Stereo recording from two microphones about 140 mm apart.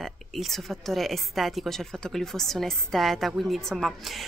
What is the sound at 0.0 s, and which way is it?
A woman's voice, centre (ahead or behind).